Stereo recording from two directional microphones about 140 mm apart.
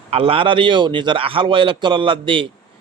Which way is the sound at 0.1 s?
40° right (ahead or behind).